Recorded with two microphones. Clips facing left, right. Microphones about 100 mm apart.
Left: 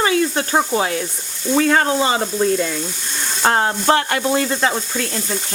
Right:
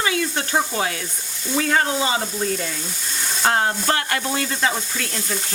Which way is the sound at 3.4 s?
35° left (ahead or behind).